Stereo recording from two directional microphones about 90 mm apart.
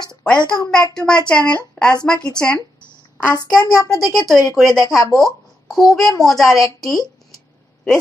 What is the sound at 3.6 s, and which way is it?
Speech, 45° left (ahead or behind).